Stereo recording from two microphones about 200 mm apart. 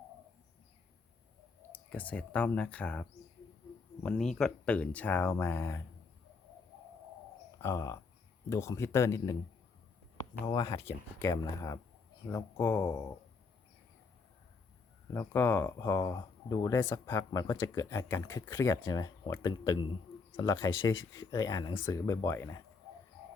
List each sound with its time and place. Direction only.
1.7 s speech: 5° left (ahead or behind)
7.6 s speech: 15° left (ahead or behind)
15.1 s speech: 10° left (ahead or behind)